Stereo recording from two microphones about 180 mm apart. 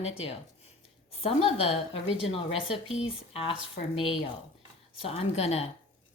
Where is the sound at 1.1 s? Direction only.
35° left (ahead or behind).